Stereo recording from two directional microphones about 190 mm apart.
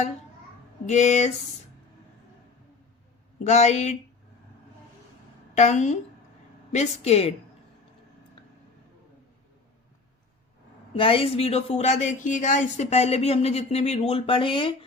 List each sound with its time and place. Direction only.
0.9 s speech: 35° left (ahead or behind)
3.4 s speech: 35° left (ahead or behind)
5.5 s speech: 40° left (ahead or behind)
10.9 s speech: 30° left (ahead or behind)